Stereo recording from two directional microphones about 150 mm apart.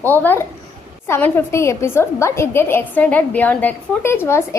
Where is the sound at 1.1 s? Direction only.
15° left (ahead or behind).